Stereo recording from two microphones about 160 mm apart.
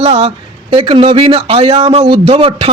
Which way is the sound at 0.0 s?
40° right (ahead or behind).